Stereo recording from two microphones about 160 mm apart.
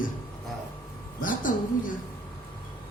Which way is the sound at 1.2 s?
55° left (ahead or behind).